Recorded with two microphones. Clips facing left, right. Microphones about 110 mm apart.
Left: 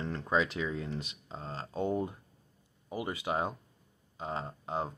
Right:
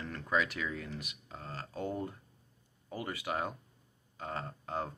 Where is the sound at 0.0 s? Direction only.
25° left (ahead or behind).